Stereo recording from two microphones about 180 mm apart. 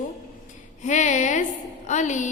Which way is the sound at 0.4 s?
45° left (ahead or behind).